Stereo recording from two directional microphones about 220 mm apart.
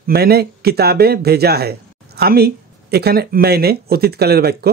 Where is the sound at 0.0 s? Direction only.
45° right (ahead or behind).